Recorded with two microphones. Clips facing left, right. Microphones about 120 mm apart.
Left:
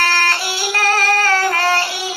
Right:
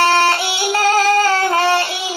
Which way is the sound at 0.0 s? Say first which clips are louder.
Right 5 dB; 25° right (ahead or behind).